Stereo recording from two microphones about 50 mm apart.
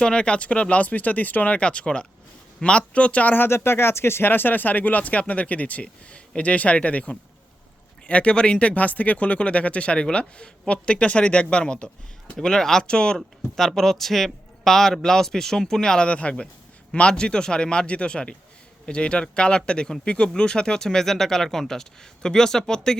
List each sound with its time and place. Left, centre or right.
0.0 s speech: centre
3.3 s speech: left; by 13.1 s centre
13.1 s speech: centre